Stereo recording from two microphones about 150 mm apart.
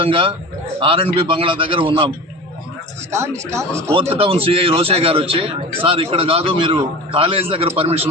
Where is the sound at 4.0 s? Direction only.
40° right (ahead or behind).